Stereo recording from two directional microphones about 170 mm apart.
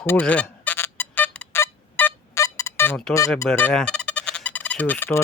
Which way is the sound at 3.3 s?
15° left (ahead or behind).